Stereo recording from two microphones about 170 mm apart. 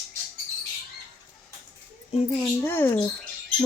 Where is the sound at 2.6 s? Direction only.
15° left (ahead or behind).